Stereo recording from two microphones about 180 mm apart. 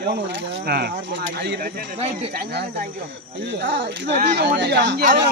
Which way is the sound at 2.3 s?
65° right (ahead or behind).